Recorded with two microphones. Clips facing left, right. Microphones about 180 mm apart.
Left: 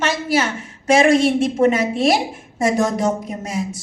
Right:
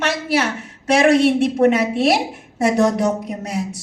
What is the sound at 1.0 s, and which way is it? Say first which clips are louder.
A woman's voice: right 3 dB; 60° right (ahead or behind).